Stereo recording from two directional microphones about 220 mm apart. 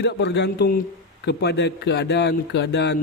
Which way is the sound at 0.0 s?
50° left (ahead or behind).